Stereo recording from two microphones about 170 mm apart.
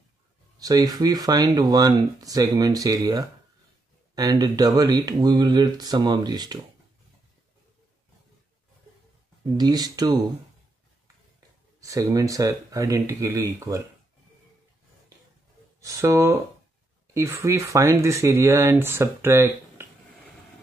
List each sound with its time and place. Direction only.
0.6 s speech: 20° right (ahead or behind)
9.6 s speech: 25° right (ahead or behind)
11.8 s speech: 20° right (ahead or behind)
15.8 s speech: 20° right (ahead or behind)